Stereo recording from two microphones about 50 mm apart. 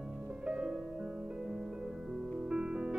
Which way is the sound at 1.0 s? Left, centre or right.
Centre.